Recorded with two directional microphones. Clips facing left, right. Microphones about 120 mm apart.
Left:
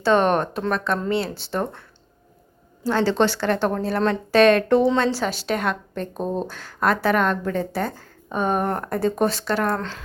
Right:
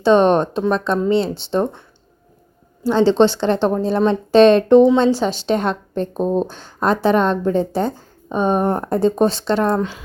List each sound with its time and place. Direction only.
0.0 s speech: 20° right (ahead or behind)
2.9 s speech: 25° right (ahead or behind)